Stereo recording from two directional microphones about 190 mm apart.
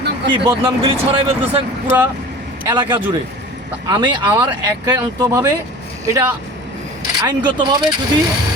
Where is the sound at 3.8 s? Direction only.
25° right (ahead or behind).